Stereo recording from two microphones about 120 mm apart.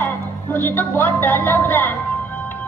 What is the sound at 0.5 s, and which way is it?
Speech, 15° left (ahead or behind).